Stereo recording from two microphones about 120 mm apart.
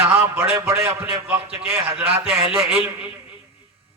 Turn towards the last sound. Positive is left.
turn(degrees=-10)  # may be behind; listen again after turning